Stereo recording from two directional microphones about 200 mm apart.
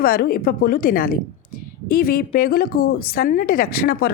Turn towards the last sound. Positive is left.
turn(degrees=50)  # may be behind; listen again after turning